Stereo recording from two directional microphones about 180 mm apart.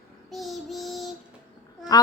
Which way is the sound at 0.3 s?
Centre (ahead or behind).